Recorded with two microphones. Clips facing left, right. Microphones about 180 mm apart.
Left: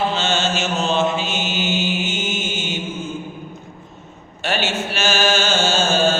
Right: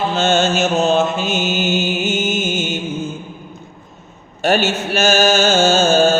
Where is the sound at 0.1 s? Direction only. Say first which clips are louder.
Right 6 dB; 45° right (ahead or behind).